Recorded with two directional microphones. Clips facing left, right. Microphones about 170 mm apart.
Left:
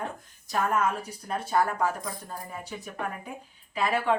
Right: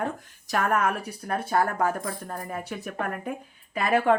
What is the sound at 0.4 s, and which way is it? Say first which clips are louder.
Speech: right 2 dB; 75° right (ahead or behind).